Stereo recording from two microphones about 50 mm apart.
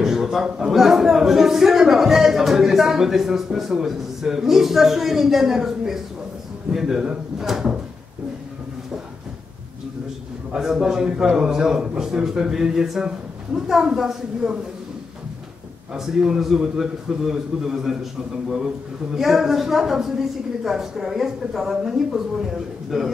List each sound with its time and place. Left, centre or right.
0.0 s a man's voice: centre
10.5 s a man's voice: centre
15.9 s a man's voice: centre
19.1 s a man's voice: centre